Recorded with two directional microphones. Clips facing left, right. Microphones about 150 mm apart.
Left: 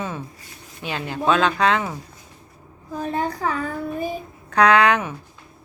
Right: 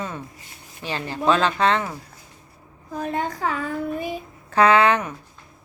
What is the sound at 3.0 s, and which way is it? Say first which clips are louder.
Child singing: left 1 dB; 35° left (ahead or behind).